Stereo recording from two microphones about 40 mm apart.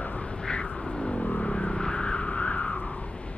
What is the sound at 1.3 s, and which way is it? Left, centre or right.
Vehicle, left.